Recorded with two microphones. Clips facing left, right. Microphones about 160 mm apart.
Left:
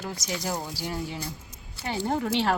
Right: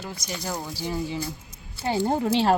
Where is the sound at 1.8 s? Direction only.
30° right (ahead or behind).